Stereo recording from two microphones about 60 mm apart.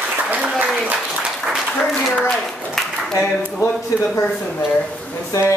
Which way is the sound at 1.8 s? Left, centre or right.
Centre.